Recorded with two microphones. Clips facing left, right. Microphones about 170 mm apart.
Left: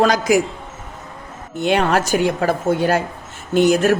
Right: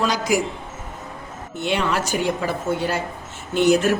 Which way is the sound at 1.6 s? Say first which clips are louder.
Left 6 dB; 50° left (ahead or behind).